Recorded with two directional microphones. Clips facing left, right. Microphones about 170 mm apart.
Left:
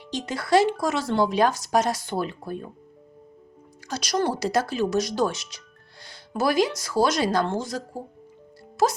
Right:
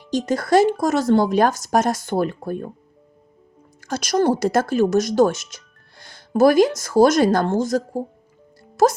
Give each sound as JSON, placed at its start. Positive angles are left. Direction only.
{"t": 0.1, "sound": "speech", "side_deg": -45}
{"t": 3.8, "sound": "speech", "side_deg": -50}